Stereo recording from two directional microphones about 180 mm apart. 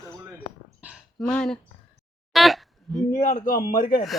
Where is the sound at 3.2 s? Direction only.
45° left (ahead or behind).